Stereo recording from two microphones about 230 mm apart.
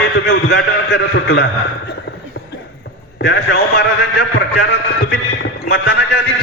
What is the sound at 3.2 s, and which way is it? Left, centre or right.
A man's voice, left.